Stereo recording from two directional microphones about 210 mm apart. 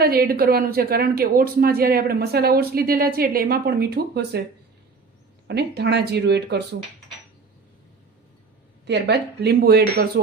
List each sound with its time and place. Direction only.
0.0 s speech: 45° right (ahead or behind)
5.5 s speech: 50° right (ahead or behind)
8.9 s speech: 55° right (ahead or behind)